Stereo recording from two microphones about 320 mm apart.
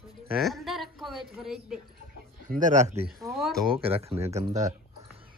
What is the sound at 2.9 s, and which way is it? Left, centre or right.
Speech, centre.